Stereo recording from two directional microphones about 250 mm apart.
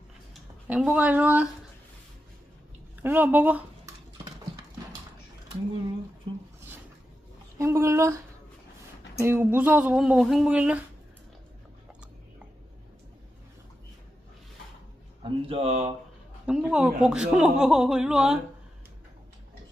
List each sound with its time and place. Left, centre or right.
0.7 s speech: centre
3.0 s speech: centre
7.6 s speech: centre
15.2 s speech: right
16.5 s speech: centre